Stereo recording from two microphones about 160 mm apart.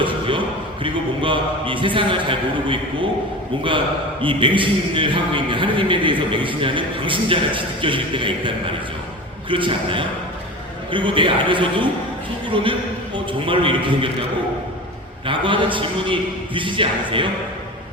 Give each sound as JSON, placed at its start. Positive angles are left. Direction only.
{"t": 0.0, "sound": "a man's voice", "side_deg": -30}
{"t": 15.3, "sound": "a man's voice", "side_deg": -30}